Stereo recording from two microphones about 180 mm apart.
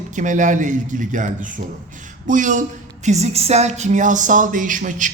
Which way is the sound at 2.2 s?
45° right (ahead or behind).